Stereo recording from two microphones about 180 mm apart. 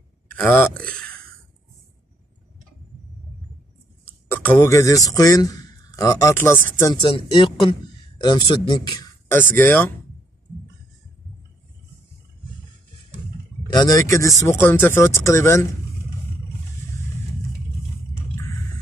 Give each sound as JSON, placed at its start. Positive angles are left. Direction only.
{"t": 0.4, "sound": "a man's voice", "side_deg": 5}
{"t": 4.3, "sound": "a man's voice", "side_deg": 10}
{"t": 6.9, "sound": "a man's voice", "side_deg": 25}
{"t": 13.7, "sound": "a man's voice", "side_deg": 20}